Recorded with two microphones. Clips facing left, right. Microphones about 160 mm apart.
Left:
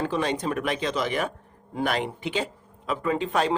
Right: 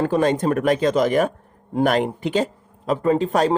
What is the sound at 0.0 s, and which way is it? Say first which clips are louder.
Speech: right 7 dB; 45° right (ahead or behind).